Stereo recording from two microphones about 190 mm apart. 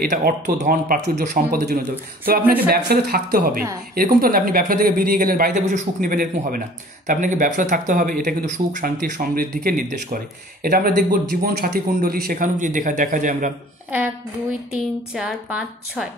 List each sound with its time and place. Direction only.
0.0 s speech: 45° right (ahead or behind)
14.7 s a woman's voice: 5° right (ahead or behind)